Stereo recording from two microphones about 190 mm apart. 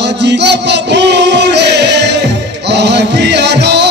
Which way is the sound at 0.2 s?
65° right (ahead or behind).